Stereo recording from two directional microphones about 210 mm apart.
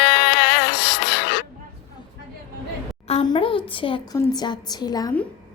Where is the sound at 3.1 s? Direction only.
25° left (ahead or behind).